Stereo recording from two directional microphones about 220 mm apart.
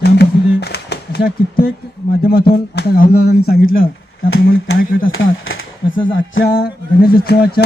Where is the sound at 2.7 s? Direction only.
45° left (ahead or behind).